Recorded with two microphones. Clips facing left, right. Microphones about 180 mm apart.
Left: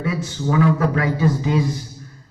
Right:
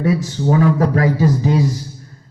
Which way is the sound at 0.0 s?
35° right (ahead or behind).